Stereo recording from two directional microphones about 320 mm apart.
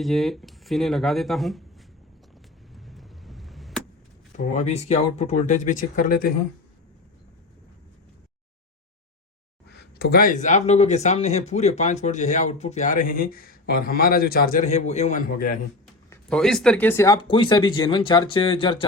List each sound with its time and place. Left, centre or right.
0.0 s speech: centre
2.7 s vehicle: centre
4.3 s speech: left
9.7 s speech: left
16.0 s speech: centre